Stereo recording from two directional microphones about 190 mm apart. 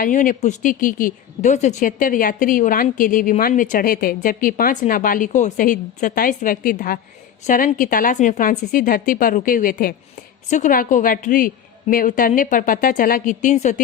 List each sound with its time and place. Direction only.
0.0 s a woman's voice: 45° left (ahead or behind)